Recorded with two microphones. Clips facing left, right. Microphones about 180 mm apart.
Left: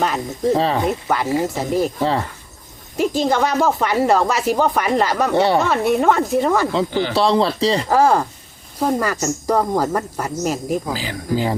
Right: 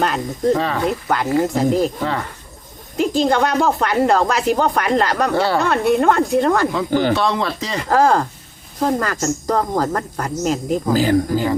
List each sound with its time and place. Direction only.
0.0 s speech: 5° left (ahead or behind)
0.5 s speech: 30° left (ahead or behind)
0.9 s speech: 5° left (ahead or behind)
3.0 s speech: 5° left (ahead or behind)
5.3 s speech: 25° left (ahead or behind)
5.5 s speech: centre (ahead or behind)
7.1 s speech: 30° left (ahead or behind)
7.9 s a woman's voice: 5° left (ahead or behind)
10.9 s speech: 50° right (ahead or behind)